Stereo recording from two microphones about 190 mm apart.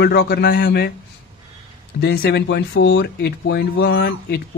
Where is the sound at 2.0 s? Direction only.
60° left (ahead or behind).